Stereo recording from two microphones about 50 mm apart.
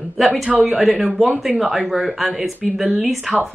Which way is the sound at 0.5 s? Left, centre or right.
Right.